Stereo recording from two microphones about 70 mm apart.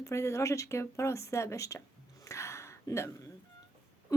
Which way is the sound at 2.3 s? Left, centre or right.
Left.